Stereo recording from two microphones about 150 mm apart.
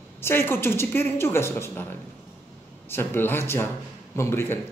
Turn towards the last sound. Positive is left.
turn(degrees=15)  # may be behind; listen again after turning